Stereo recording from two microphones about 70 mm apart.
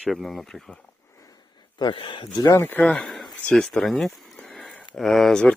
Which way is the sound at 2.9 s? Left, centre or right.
Centre.